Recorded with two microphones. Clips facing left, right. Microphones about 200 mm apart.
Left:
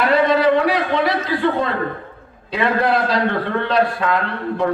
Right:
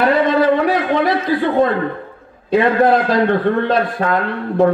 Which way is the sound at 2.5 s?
50° right (ahead or behind).